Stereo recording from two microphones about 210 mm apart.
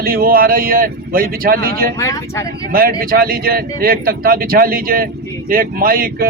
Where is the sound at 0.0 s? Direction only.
45° right (ahead or behind).